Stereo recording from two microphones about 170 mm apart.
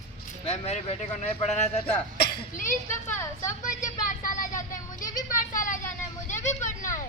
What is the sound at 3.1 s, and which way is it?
Speech, 15° left (ahead or behind).